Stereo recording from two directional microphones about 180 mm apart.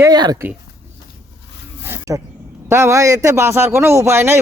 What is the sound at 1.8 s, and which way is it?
Snake, 10° right (ahead or behind).